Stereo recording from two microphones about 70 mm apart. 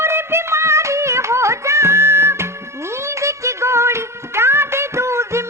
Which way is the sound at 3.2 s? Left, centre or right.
Right.